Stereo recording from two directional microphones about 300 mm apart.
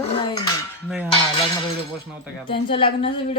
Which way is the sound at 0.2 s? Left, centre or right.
Centre.